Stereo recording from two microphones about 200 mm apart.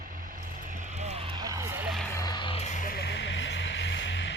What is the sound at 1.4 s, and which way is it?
Vehicle, 15° right (ahead or behind).